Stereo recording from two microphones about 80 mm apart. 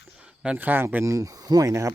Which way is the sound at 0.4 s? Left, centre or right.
Centre.